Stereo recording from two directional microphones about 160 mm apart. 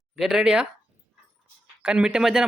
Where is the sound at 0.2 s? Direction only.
Centre (ahead or behind).